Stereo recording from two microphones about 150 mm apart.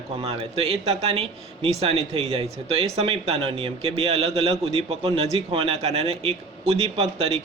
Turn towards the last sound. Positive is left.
turn(degrees=-40)  # may be behind; listen again after turning